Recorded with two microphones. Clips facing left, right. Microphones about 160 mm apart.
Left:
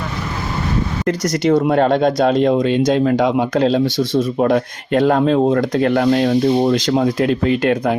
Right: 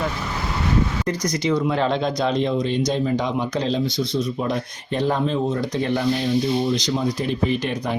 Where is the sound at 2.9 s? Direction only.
80° left.